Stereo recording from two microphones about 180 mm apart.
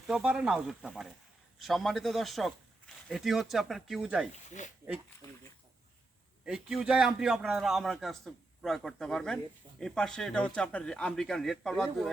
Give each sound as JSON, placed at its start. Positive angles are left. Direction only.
{"t": 0.1, "sound": "a man's voice", "side_deg": -5}
{"t": 4.3, "sound": "speech", "side_deg": 45}
{"t": 6.4, "sound": "a man's voice", "side_deg": -5}